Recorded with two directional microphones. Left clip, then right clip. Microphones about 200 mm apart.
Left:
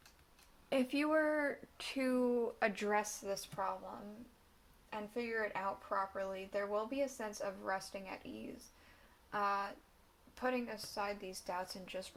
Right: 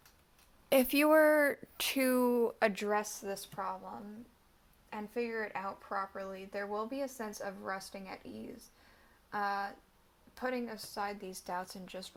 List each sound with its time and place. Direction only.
0.7 s speech: 55° right (ahead or behind); by 3.8 s 25° right (ahead or behind)
4.9 s speech: 25° right (ahead or behind)